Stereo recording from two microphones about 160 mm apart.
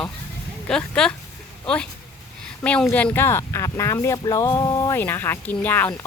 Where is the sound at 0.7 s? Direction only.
5° left (ahead or behind).